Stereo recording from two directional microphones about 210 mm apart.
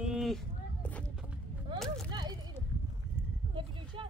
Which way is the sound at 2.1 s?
20° right (ahead or behind).